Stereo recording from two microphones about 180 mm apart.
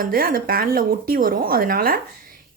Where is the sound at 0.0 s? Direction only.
55° right (ahead or behind).